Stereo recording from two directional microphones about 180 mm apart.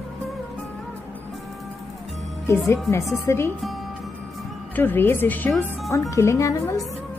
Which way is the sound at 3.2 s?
15° left (ahead or behind).